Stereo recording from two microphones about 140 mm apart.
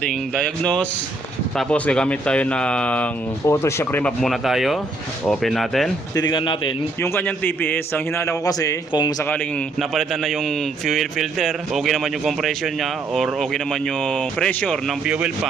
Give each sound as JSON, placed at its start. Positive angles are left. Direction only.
{"t": 0.0, "sound": "a man's voice", "side_deg": 5}
{"t": 4.2, "sound": "a man's voice", "side_deg": 0}
{"t": 6.1, "sound": "a man's voice", "side_deg": 35}
{"t": 7.0, "sound": "a man's voice", "side_deg": 15}
{"t": 9.2, "sound": "speech", "side_deg": 10}
{"t": 9.7, "sound": "a man's voice", "side_deg": 0}
{"t": 15.0, "sound": "speech", "side_deg": -10}